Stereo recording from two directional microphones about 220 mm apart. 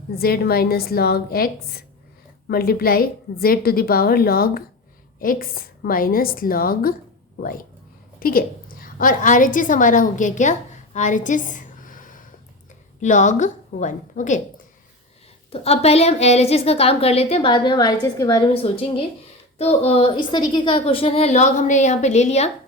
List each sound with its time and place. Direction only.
0.2 s a woman's voice: 45° left (ahead or behind)
8.2 s a woman's voice: 40° left (ahead or behind)
10.9 s a sound: 35° left (ahead or behind)
13.0 s a woman's voice: 35° left (ahead or behind)
15.5 s a woman's voice: 30° left (ahead or behind)